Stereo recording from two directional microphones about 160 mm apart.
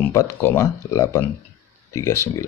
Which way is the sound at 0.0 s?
20° left (ahead or behind).